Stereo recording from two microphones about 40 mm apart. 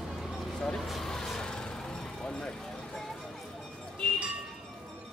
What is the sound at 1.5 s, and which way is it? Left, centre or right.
Music, centre.